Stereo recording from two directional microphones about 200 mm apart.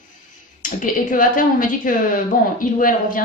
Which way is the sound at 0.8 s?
45° left (ahead or behind).